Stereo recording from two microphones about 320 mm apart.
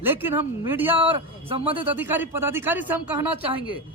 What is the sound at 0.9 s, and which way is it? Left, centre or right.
A man's voice, centre.